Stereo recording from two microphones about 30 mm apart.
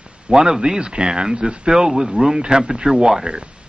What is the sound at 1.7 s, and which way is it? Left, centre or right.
Speech, centre.